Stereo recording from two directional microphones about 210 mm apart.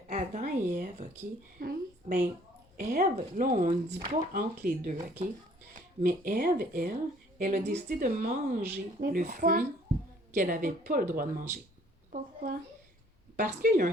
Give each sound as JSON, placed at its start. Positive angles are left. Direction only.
{"t": 0.1, "sound": "a sound", "side_deg": -35}
{"t": 1.5, "sound": "speech", "side_deg": -45}
{"t": 3.9, "sound": "speech", "side_deg": -30}
{"t": 4.6, "sound": "speech", "side_deg": -45}
{"t": 6.0, "sound": "speech", "side_deg": -45}